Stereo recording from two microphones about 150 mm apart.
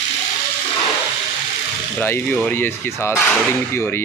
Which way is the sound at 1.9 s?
15° left (ahead or behind).